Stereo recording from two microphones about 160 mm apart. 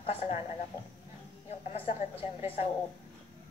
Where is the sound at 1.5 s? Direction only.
40° left (ahead or behind).